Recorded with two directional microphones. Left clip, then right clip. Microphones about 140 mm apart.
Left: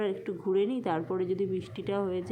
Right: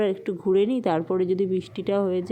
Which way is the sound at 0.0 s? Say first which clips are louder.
Right 7 dB; 45° right (ahead or behind).